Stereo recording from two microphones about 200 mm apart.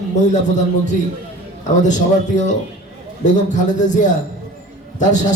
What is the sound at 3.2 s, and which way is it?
Music, 40° left (ahead or behind).